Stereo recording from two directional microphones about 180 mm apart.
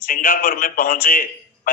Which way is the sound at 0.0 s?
50° left (ahead or behind).